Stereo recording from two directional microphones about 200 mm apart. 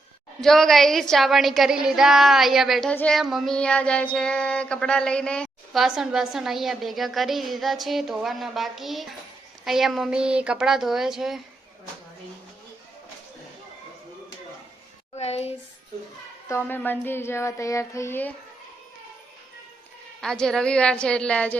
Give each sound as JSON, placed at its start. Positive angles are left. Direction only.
{"t": 0.4, "sound": "child singing", "side_deg": 0}
{"t": 15.1, "sound": "speech", "side_deg": 30}
{"t": 16.5, "sound": "child singing", "side_deg": 10}
{"t": 20.2, "sound": "child singing", "side_deg": 5}